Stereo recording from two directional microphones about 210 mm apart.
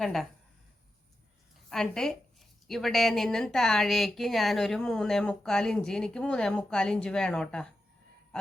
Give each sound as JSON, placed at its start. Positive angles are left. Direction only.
{"t": 0.0, "sound": "a woman's voice", "side_deg": 0}
{"t": 1.7, "sound": "a woman's voice", "side_deg": 5}